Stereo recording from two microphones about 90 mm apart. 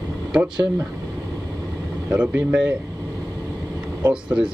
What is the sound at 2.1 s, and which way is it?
Speech, 15° right (ahead or behind).